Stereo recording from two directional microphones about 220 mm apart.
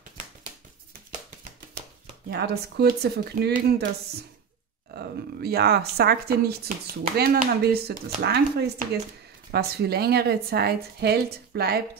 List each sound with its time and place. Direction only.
2.3 s speech: 45° right (ahead or behind)
4.9 s speech: 45° right (ahead or behind)